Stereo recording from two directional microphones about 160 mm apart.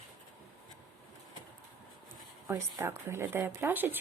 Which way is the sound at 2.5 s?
15° right (ahead or behind).